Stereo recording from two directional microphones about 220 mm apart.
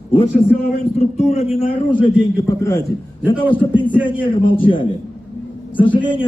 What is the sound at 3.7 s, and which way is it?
A man's voice, 20° left (ahead or behind).